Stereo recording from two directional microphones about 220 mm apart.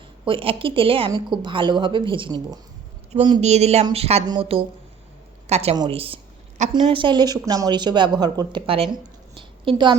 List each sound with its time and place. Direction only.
0.3 s a woman's voice: 25° right (ahead or behind)